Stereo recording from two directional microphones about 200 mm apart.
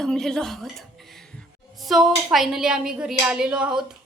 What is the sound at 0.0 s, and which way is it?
Speech, 5° left (ahead or behind).